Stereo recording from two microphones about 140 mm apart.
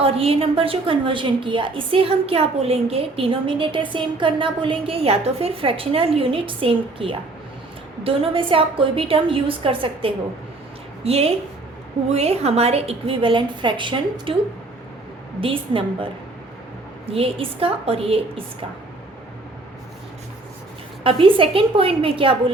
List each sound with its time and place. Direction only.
0.0 s a woman's voice: 45° right (ahead or behind)
15.4 s a woman's voice: 40° right (ahead or behind)
17.1 s a woman's voice: 40° right (ahead or behind)
21.0 s a woman's voice: 40° right (ahead or behind)